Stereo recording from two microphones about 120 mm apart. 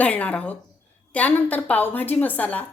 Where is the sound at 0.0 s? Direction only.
10° left (ahead or behind).